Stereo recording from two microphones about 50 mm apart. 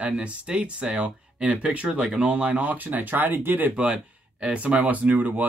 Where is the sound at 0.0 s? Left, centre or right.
Right.